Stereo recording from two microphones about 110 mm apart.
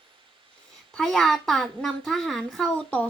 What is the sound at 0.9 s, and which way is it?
A child's voice, 5° left (ahead or behind).